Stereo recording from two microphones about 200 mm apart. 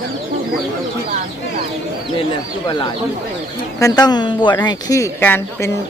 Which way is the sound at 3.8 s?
20° left (ahead or behind).